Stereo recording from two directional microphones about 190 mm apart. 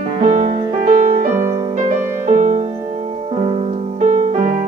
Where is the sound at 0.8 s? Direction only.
45° right (ahead or behind).